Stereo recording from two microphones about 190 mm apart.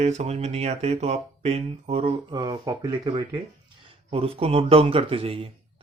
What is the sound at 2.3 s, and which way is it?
Speech, 20° right (ahead or behind).